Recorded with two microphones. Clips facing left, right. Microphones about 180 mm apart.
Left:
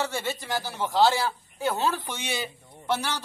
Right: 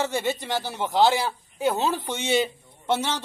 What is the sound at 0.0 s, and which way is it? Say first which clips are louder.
Speech: right 4 dB; 20° right (ahead or behind).